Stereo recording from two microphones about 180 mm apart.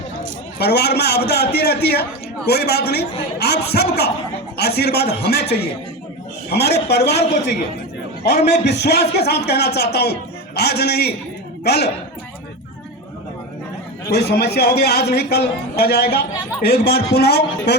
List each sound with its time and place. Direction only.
0.6 s a man's voice: 65° left (ahead or behind)
6.5 s a man's voice: 65° left (ahead or behind)
14.1 s a man's voice: 65° left (ahead or behind)